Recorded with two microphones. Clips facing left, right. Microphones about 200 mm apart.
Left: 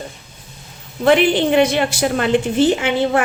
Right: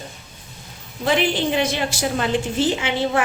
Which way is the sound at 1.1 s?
60° left (ahead or behind).